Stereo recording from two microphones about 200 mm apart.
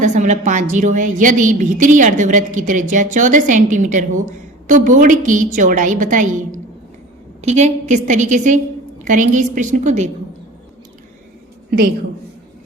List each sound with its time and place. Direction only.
0.0 s a woman's voice: 40° right (ahead or behind)